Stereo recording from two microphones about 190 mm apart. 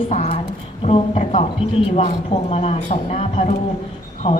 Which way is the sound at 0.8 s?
35° left (ahead or behind).